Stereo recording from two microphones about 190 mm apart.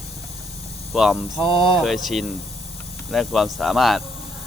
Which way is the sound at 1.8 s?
Centre (ahead or behind).